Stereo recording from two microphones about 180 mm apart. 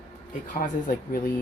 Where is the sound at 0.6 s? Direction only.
50° left (ahead or behind).